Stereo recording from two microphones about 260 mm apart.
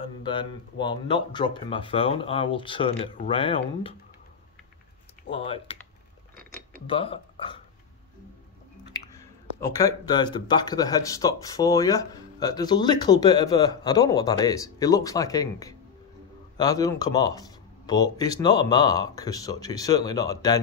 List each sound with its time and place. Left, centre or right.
0.0 s speech: centre
5.3 s speech: left
6.9 s speech: left
9.1 s speech: centre